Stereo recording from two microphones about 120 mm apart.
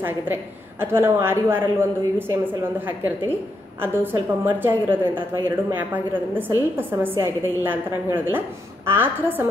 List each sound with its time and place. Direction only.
0.0 s a woman's voice: 20° right (ahead or behind)
3.8 s a woman's voice: 20° right (ahead or behind)